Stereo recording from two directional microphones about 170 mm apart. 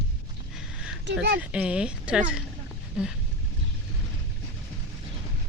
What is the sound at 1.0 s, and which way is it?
Speech, 90° right.